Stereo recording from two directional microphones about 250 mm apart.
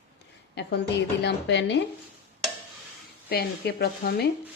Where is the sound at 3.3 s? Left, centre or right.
Left.